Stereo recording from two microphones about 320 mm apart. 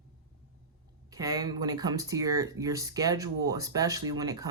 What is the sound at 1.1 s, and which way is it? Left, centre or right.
Speech, centre.